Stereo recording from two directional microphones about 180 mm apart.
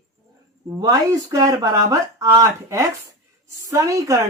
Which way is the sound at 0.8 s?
20° right (ahead or behind).